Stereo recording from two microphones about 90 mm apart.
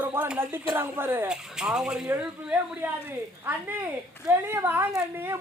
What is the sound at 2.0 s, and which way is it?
Speech, 25° right (ahead or behind).